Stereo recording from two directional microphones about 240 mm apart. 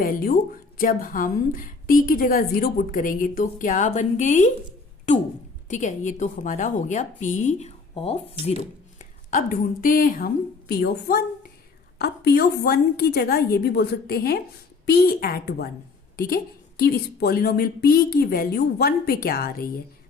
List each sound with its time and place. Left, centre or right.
0.0 s a woman's voice: left
5.6 s a woman's voice: left